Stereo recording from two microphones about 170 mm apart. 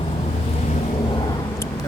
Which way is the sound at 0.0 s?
35° left (ahead or behind).